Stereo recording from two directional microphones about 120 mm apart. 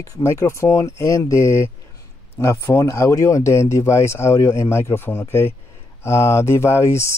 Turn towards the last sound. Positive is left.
turn(degrees=25)  # may be behind; listen again after turning